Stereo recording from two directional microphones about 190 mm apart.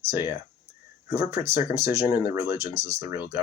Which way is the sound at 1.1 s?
15° right (ahead or behind).